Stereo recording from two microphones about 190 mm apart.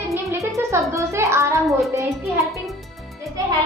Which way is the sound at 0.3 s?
15° right (ahead or behind).